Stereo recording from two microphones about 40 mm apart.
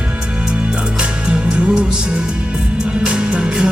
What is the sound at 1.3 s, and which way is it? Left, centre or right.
Music, right.